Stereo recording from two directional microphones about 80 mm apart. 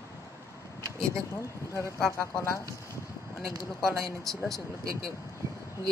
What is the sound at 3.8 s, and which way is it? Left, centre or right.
Speech, centre.